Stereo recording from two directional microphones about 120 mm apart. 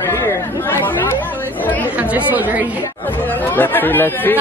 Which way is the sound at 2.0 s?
15° right (ahead or behind).